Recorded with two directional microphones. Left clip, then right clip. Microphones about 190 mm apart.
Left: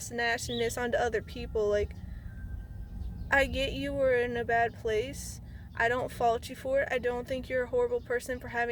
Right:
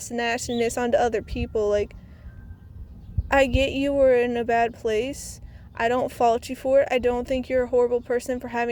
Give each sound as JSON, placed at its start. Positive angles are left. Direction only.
{"t": 0.0, "sound": "speech", "side_deg": -35}
{"t": 3.2, "sound": "speech", "side_deg": -35}